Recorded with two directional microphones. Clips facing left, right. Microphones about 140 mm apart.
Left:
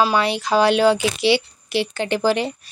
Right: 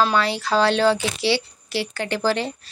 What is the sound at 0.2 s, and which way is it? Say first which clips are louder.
Speech: left 2 dB; 20° left (ahead or behind).